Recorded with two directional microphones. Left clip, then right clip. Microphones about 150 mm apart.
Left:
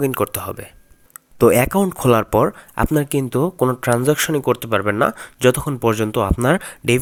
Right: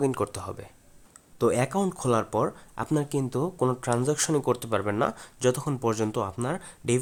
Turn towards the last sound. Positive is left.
turn(degrees=45)  # may be behind; listen again after turning